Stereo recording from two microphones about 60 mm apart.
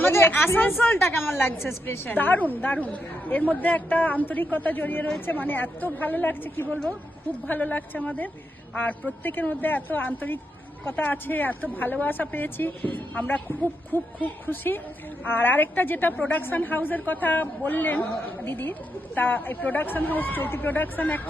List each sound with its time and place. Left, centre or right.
0.0 s speech: left
2.0 s a man's voice: left